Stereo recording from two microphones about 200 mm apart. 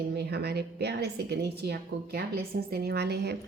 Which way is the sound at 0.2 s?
55° right (ahead or behind).